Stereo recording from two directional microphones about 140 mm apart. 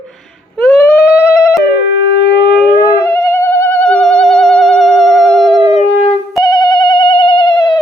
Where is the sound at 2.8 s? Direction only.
20° left (ahead or behind); by 5.6 s 5° left (ahead or behind).